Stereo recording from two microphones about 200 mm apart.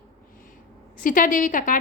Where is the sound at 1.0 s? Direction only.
40° left (ahead or behind).